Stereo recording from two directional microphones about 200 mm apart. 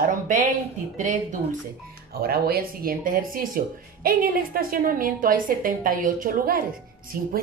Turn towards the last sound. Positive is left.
turn(degrees=-45)  # may be behind; listen again after turning